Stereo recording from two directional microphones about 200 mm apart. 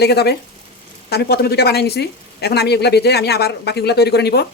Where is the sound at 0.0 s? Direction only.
55° left (ahead or behind).